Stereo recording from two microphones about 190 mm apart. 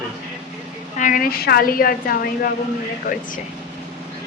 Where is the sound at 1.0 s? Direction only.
45° left (ahead or behind).